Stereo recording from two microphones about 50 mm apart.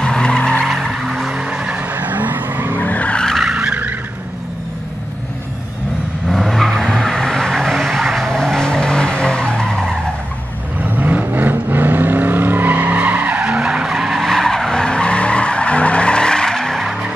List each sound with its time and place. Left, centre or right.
0.0 s vehicle: centre
0.7 s skidding: centre
0.9 s vehicle: centre
1.8 s vehicle: right
2.8 s vehicle: left
3.5 s vehicle: right
6.2 s vehicle: centre
10.8 s vehicle: right
13.4 s skidding: centre
14.2 s skidding: centre
16.7 s skidding: centre